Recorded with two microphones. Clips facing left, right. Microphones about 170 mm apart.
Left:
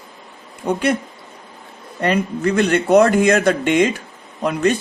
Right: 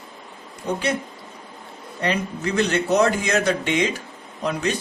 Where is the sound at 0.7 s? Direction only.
55° left (ahead or behind).